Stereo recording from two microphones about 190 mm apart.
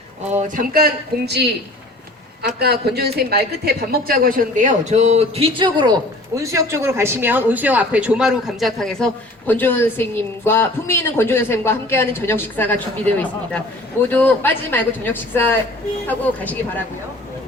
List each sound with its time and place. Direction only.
0.4 s speech: 50° right (ahead or behind)
2.6 s a man's voice: 55° right (ahead or behind); by 16.6 s 10° left (ahead or behind)